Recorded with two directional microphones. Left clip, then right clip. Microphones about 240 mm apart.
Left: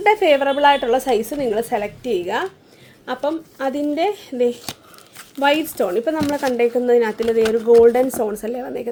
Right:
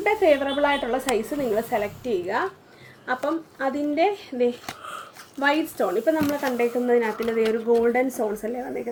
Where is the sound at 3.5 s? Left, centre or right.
Left.